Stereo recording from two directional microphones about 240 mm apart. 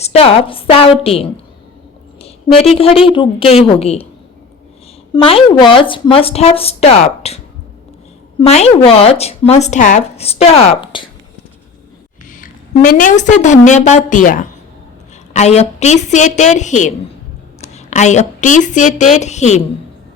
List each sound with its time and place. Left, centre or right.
0.0 s speech: left
2.7 s speech: left
5.1 s speech: centre
12.9 s a woman's voice: left